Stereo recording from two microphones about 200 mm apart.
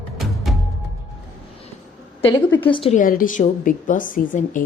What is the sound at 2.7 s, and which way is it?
Speech, 25° left (ahead or behind).